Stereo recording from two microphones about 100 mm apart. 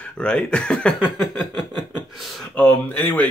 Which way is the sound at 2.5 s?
15° left (ahead or behind).